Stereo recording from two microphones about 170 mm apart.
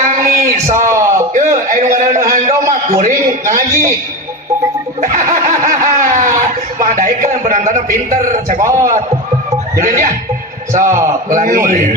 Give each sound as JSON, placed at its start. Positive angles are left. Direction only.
{"t": 0.0, "sound": "a sound", "side_deg": -50}
{"t": 4.9, "sound": "snicker", "side_deg": -50}
{"t": 9.7, "sound": "a man's voice", "side_deg": -50}